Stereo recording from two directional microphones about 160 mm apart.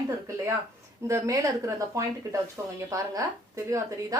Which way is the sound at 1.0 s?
20° right (ahead or behind).